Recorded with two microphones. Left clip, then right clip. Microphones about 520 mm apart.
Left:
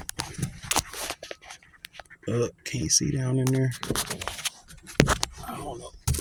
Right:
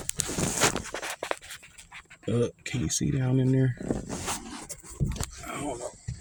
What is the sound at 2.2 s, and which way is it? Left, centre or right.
Speech, left.